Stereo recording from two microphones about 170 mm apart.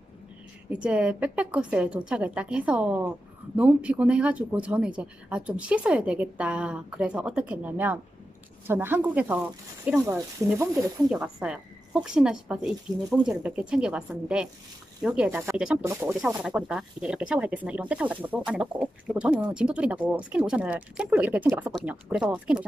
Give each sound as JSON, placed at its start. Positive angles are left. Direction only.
{"t": 0.7, "sound": "speech", "side_deg": -5}
{"t": 11.1, "sound": "speech", "side_deg": -5}
{"t": 16.3, "sound": "speech", "side_deg": -5}